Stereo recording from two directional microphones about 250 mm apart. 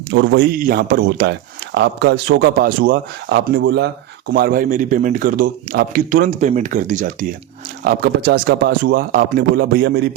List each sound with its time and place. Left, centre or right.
0.1 s speech: right